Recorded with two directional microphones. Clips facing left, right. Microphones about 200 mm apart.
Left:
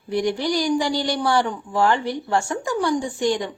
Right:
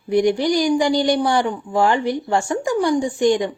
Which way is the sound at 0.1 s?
15° right (ahead or behind).